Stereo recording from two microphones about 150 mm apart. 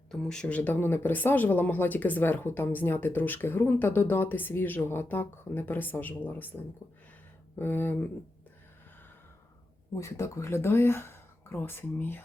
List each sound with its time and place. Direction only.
0.1 s speech: 5° left (ahead or behind)
7.6 s speech: 15° left (ahead or behind)
9.9 s speech: 20° left (ahead or behind)